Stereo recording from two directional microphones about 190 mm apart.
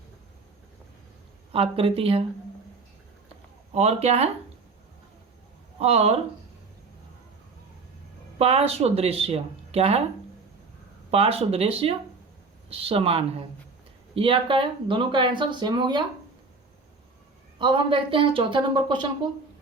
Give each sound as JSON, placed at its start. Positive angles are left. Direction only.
{"t": 1.5, "sound": "speech", "side_deg": -30}
{"t": 3.7, "sound": "speech", "side_deg": -35}
{"t": 5.8, "sound": "speech", "side_deg": -35}
{"t": 8.4, "sound": "speech", "side_deg": -30}
{"t": 11.1, "sound": "speech", "side_deg": -30}
{"t": 17.6, "sound": "speech", "side_deg": -25}